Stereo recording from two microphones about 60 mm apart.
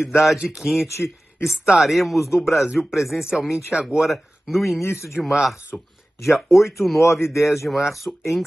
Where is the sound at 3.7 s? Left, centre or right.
Centre.